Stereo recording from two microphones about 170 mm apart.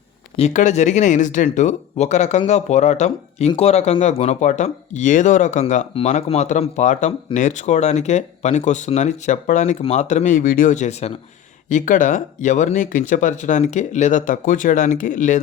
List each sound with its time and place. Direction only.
0.3 s speech: 45° left (ahead or behind)
5.9 s speech: 35° left (ahead or behind)